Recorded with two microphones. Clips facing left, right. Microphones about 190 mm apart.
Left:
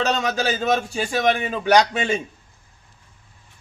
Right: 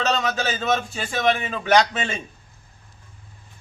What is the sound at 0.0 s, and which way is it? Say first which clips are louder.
A man's voice: left 2 dB; 10° left (ahead or behind).